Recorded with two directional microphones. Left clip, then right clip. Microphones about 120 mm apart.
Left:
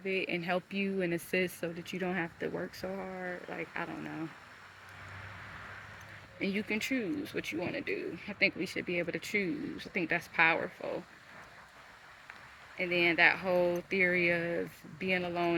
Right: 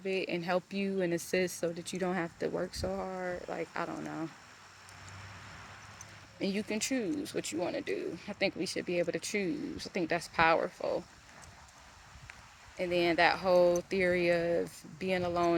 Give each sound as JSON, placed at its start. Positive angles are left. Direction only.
{"t": 0.0, "sound": "speech", "side_deg": 10}
{"t": 1.8, "sound": "speech", "side_deg": 5}
{"t": 6.4, "sound": "speech", "side_deg": 5}
{"t": 12.7, "sound": "speech", "side_deg": 5}